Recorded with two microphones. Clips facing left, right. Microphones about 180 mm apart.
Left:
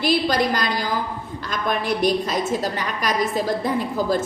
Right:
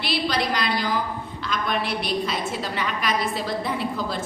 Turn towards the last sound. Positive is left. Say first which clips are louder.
# left 5 dB
turn(degrees=45)  # may be behind; listen again after turning